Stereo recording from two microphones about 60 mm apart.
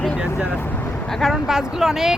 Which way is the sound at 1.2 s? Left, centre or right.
Centre.